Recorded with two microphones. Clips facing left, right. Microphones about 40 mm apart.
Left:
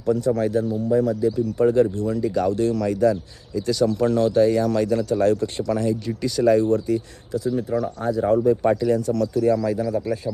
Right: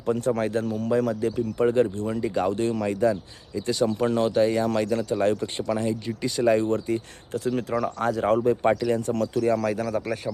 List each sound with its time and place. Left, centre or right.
0.0 s speech: right
0.6 s speech: right
1.4 s speech: right
7.3 s speech: right
8.4 s speech: right
9.5 s speech: right